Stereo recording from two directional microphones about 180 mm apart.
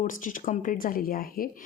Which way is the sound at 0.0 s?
45° left (ahead or behind).